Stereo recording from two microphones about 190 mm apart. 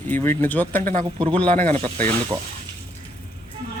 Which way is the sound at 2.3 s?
15° right (ahead or behind).